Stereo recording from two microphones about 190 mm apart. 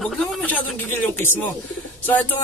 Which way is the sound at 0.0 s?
Centre (ahead or behind).